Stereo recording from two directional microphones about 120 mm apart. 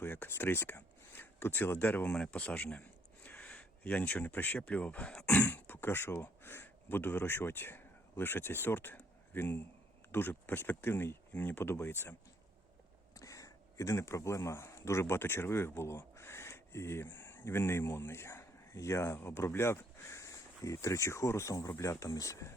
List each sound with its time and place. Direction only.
0.0 s speech: 15° left (ahead or behind)
13.1 s speech: 30° left (ahead or behind)